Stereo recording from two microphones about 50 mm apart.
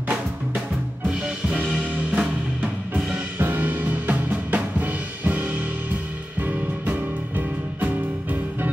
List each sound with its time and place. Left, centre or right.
1.7 s music: centre
3.3 s music: right
4.5 s drum kit: right
6.4 s music: right